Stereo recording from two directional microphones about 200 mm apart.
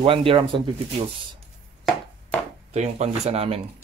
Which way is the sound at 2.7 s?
35° right (ahead or behind).